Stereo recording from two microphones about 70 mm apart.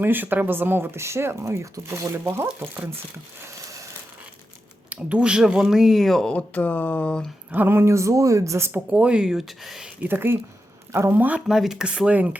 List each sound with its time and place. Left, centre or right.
0.0 s speech: right
4.9 s speech: centre
6.2 s speech: left
7.5 s a woman's voice: right
8.7 s speech: centre
10.0 s speech: right
11.4 s speech: centre